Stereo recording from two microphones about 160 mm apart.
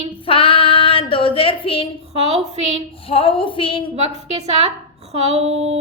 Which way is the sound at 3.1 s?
35° left (ahead or behind).